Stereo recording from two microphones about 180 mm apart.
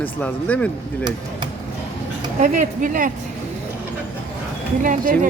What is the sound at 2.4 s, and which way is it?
Speech, 45° right (ahead or behind).